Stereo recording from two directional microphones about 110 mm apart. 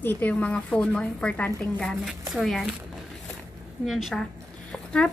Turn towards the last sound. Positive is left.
turn(degrees=5)  # may be behind; listen again after turning